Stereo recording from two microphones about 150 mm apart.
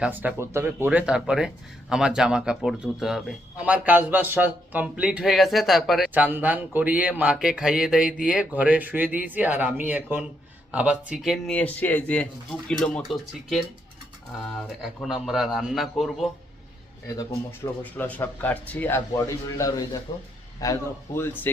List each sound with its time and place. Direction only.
0.0 s a man's voice: 10° right (ahead or behind)
14.8 s speech: centre (ahead or behind)
17.9 s a man's voice: 10° left (ahead or behind)